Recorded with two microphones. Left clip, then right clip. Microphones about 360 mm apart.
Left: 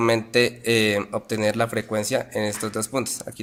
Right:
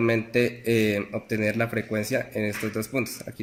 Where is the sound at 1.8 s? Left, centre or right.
Left.